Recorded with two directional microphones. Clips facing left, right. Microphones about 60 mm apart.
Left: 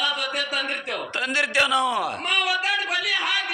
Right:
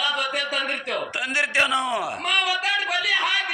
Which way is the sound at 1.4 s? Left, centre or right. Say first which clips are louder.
Even; right.